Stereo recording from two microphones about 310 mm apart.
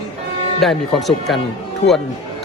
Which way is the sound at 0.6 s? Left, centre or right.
Centre.